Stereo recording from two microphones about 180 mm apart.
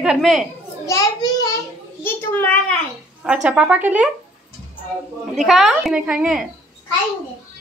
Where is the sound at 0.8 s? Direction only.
20° left (ahead or behind).